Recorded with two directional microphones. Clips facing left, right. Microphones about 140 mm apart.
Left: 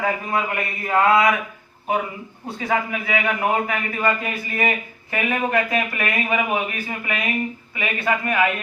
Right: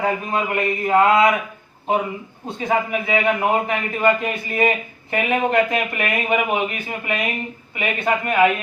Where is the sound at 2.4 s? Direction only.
20° right (ahead or behind).